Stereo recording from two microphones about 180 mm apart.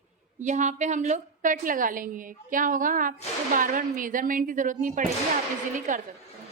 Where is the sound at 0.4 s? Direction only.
40° right (ahead or behind).